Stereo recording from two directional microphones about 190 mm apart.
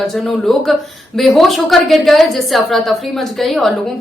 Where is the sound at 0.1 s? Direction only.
Centre (ahead or behind).